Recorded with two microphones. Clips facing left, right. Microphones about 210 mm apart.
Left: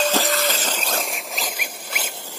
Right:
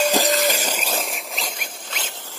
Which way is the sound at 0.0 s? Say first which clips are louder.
Right 2 dB; 15° right (ahead or behind).